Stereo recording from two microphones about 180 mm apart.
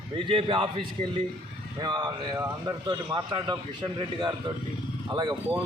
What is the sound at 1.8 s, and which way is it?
A man's voice, 25° right (ahead or behind).